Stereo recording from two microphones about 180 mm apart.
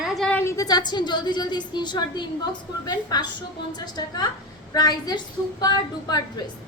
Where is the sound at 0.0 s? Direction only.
Centre (ahead or behind).